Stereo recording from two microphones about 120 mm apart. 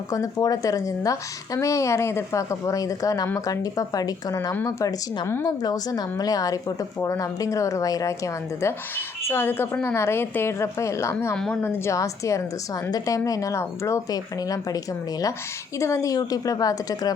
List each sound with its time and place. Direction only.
0.1 s a woman's voice: 30° left (ahead or behind)
15.8 s a woman's voice: 25° left (ahead or behind)